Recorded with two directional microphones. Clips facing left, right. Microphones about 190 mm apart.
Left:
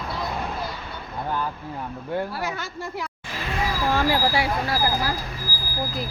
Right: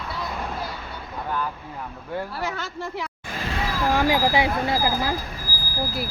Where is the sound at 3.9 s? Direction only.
15° right (ahead or behind).